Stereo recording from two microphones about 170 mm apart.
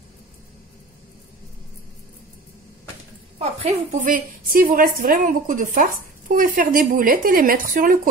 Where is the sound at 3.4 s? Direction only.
40° right (ahead or behind).